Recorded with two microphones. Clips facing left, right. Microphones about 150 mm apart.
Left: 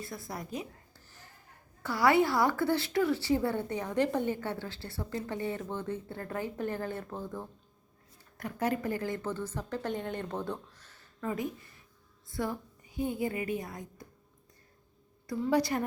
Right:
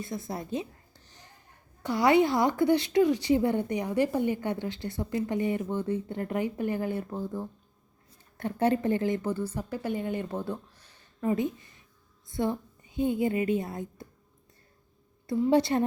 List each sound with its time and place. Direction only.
0.0 s speech: 20° right (ahead or behind)
8.4 s a woman's voice: 30° right (ahead or behind)
15.3 s a woman's voice: 25° right (ahead or behind)